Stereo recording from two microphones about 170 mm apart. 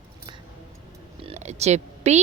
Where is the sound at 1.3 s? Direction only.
40° right (ahead or behind).